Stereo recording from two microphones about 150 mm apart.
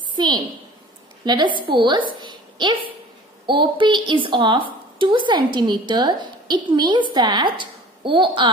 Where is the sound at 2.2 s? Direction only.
30° right (ahead or behind).